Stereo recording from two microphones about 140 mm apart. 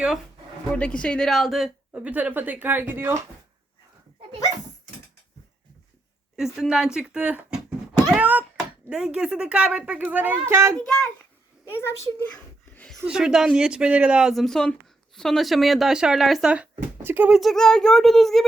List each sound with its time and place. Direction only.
0.8 s a woman's voice: 10° left (ahead or behind); by 3.2 s 15° right (ahead or behind)
6.3 s a woman's voice: 5° right (ahead or behind); by 10.8 s 20° right (ahead or behind)
10.8 s speech: 5° left (ahead or behind)
11.7 s a child's voice: 15° left (ahead or behind)
12.7 s a sound: 5° left (ahead or behind)
13.1 s speech: 5° right (ahead or behind)